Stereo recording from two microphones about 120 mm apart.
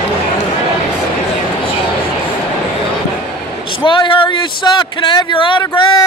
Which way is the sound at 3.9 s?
45° left (ahead or behind).